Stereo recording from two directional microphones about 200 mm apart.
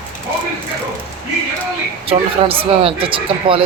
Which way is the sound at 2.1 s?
25° right (ahead or behind).